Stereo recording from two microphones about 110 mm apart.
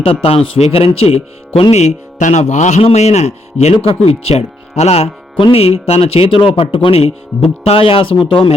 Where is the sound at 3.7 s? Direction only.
55° left (ahead or behind).